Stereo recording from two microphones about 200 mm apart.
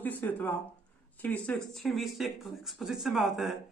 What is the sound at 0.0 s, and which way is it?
A man's voice, 10° left (ahead or behind).